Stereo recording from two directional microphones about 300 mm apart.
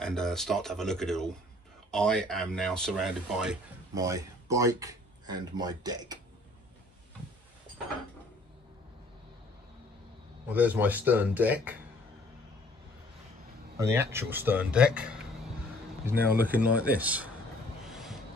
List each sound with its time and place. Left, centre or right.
0.0 s speech: centre
10.5 s speech: centre
13.7 s speech: centre
17.8 s a sound: centre